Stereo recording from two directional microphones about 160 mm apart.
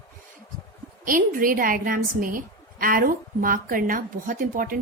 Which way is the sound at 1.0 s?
60° right (ahead or behind).